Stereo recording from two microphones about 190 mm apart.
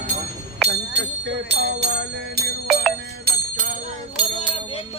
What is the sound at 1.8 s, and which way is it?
Bell, 60° right (ahead or behind).